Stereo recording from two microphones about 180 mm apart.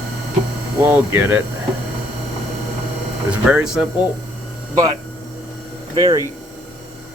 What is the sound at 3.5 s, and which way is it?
Speech, 5° right (ahead or behind).